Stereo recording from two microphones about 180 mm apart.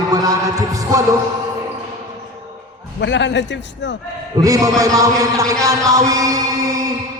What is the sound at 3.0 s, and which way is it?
Speech, 85° left.